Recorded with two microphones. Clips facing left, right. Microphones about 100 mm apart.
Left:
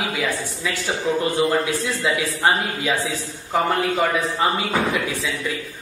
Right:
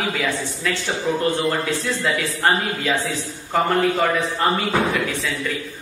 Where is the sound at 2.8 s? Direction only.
Centre (ahead or behind).